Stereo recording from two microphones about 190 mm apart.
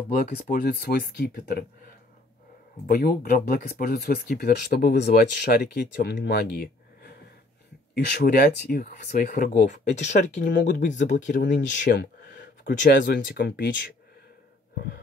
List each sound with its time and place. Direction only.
0.1 s speech: 50° left (ahead or behind)
2.9 s speech: 55° left (ahead or behind)